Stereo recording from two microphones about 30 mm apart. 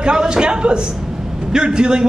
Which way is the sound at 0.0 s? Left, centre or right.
Right.